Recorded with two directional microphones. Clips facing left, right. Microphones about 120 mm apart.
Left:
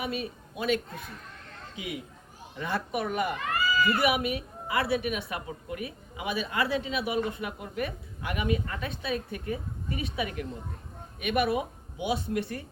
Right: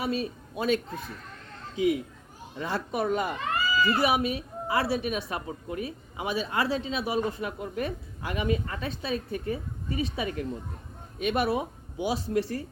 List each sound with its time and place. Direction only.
0.0 s a man's voice: 35° right (ahead or behind)